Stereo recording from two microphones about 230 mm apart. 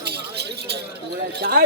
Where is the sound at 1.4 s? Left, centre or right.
Right.